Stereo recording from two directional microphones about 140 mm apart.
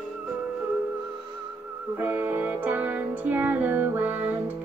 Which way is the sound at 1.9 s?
15° right (ahead or behind).